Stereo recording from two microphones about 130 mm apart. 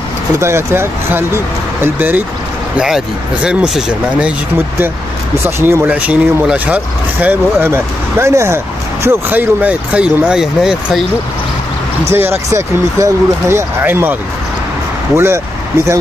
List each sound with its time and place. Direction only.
0.4 s speech: 20° right (ahead or behind)
3.4 s speech: 5° right (ahead or behind)
5.4 s speech: 20° right (ahead or behind)
12.1 s speech: 20° right (ahead or behind)
15.1 s speech: 20° right (ahead or behind)